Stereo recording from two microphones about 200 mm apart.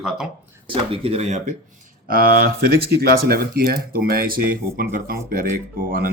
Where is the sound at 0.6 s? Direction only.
30° right (ahead or behind).